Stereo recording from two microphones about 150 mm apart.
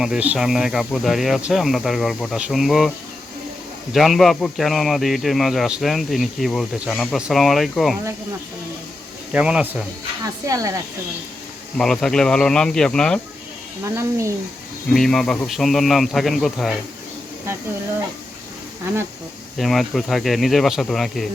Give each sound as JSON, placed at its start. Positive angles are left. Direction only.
{"t": 0.0, "sound": "a man's voice", "side_deg": -5}
{"t": 3.9, "sound": "a man's voice", "side_deg": 0}
{"t": 9.3, "sound": "speech", "side_deg": -10}
{"t": 10.4, "sound": "speech", "side_deg": -20}
{"t": 11.8, "sound": "a man's voice", "side_deg": 5}
{"t": 13.9, "sound": "speech", "side_deg": -20}
{"t": 14.9, "sound": "a man's voice", "side_deg": 0}
{"t": 19.5, "sound": "a man's voice", "side_deg": 0}